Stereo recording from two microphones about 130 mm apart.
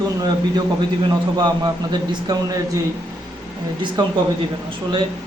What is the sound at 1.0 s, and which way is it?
Speech, 35° right (ahead or behind).